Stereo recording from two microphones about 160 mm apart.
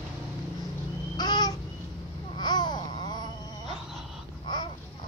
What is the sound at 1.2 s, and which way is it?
Babbling, 25° left (ahead or behind).